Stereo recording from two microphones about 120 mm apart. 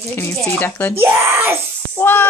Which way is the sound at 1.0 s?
20° right (ahead or behind).